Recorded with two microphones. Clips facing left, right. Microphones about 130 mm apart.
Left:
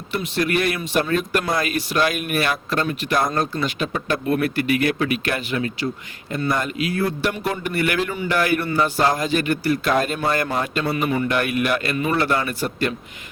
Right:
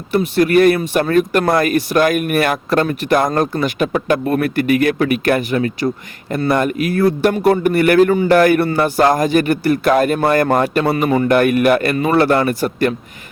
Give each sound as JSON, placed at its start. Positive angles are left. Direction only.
{"t": 0.1, "sound": "speech", "side_deg": -40}
{"t": 6.5, "sound": "speech", "side_deg": -65}
{"t": 6.8, "sound": "speech", "side_deg": -50}
{"t": 8.7, "sound": "speech", "side_deg": -55}
{"t": 10.6, "sound": "a man's voice", "side_deg": -65}
{"t": 11.1, "sound": "speech", "side_deg": -40}